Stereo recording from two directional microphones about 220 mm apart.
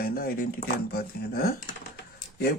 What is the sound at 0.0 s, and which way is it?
Speech, 40° left (ahead or behind).